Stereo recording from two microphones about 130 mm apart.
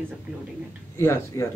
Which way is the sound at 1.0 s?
15° left (ahead or behind).